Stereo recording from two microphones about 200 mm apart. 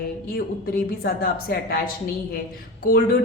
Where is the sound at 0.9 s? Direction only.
50° left (ahead or behind).